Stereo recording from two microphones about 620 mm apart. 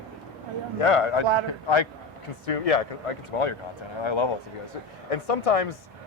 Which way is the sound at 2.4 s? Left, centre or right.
Left.